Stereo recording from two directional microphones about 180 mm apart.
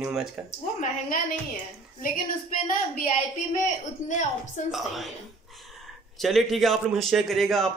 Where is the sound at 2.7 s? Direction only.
45° left (ahead or behind).